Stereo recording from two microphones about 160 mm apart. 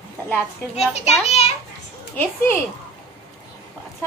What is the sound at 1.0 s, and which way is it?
Speech, 45° left (ahead or behind).